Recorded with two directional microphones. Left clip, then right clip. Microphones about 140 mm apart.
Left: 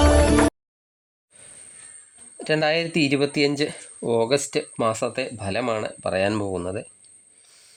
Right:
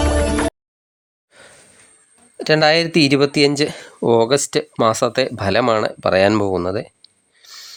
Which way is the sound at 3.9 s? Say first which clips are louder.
Right 8 dB; 50° right (ahead or behind).